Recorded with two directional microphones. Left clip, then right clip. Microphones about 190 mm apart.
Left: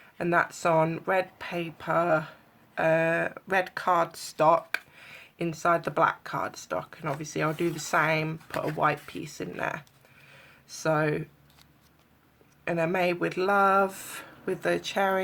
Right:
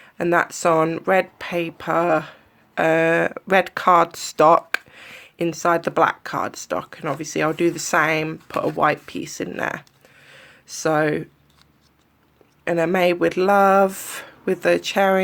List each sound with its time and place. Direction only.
0.0 s speech: 45° right (ahead or behind)
10.2 s a sound: 45° right (ahead or behind)
12.6 s speech: 40° right (ahead or behind)